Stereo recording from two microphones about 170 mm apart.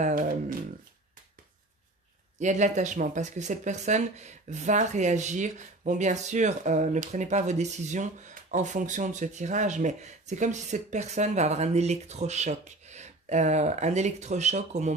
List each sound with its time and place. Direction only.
0.0 s speech: 50° right (ahead or behind)
2.3 s speech: 45° right (ahead or behind)